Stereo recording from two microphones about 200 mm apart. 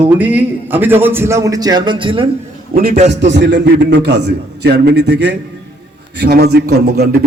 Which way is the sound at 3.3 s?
60° right (ahead or behind).